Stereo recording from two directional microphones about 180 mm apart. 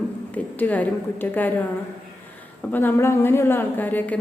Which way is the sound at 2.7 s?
10° left (ahead or behind).